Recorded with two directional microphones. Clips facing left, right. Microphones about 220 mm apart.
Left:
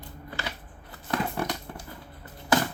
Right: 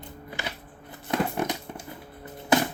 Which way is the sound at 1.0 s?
20° right (ahead or behind).